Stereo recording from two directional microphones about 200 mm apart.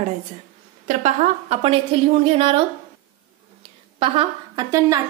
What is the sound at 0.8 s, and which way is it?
A woman's voice, 35° right (ahead or behind).